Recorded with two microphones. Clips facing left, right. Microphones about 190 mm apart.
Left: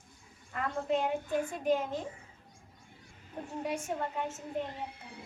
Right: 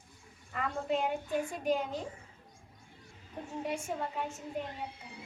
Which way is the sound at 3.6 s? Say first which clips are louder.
Left 1 dB; centre (ahead or behind).